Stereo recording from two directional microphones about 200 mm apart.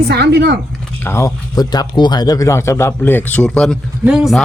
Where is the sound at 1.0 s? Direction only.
15° left (ahead or behind).